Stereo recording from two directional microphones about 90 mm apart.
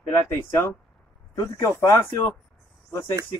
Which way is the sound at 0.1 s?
25° left (ahead or behind).